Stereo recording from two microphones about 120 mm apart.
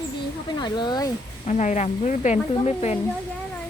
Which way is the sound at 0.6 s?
40° left (ahead or behind).